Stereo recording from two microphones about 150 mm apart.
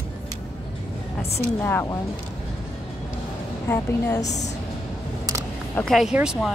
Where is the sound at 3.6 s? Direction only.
15° left (ahead or behind).